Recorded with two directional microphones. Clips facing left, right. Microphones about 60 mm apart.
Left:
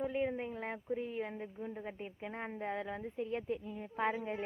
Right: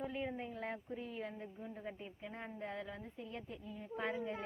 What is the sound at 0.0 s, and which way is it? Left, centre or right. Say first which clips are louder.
A woman's voice: left 6 dB; left.